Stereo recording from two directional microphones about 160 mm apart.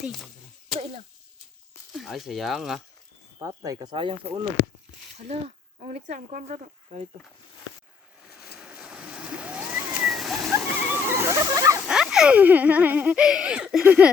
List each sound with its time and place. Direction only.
0.0 s speech: centre (ahead or behind)
1.9 s speech: centre (ahead or behind)
3.3 s speech: 20° right (ahead or behind)
5.8 s speech: 45° right (ahead or behind)
8.5 s a sound: 5° right (ahead or behind)
10.6 s a sound: 10° right (ahead or behind)
11.9 s giggle: 5° right (ahead or behind)